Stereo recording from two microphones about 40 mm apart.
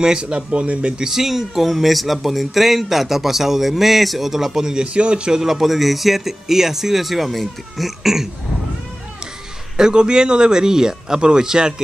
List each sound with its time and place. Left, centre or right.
0.0 s speech: right
1.0 s speech: centre
4.9 s speech: right
5.4 s speech: centre
9.8 s speech: centre